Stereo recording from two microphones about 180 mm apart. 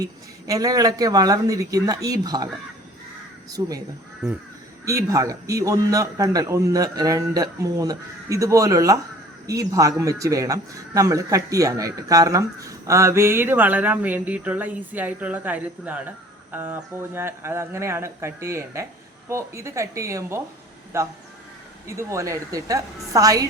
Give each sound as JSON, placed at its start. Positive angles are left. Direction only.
{"t": 0.0, "sound": "a man's voice", "side_deg": -20}
{"t": 3.6, "sound": "a man's voice", "side_deg": -20}
{"t": 4.2, "sound": "crow", "side_deg": -5}
{"t": 4.9, "sound": "a man's voice", "side_deg": -20}